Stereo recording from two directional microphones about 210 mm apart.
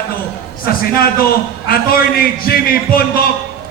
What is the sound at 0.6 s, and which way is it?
A man's voice, 45° left (ahead or behind).